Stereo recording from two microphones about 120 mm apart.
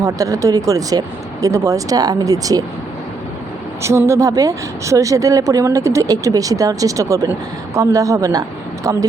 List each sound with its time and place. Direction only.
0.0 s a woman's voice: 30° right (ahead or behind)
3.8 s a woman's voice: 25° right (ahead or behind)